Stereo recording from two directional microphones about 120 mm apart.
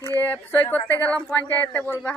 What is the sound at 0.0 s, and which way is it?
Speech, 20° left (ahead or behind).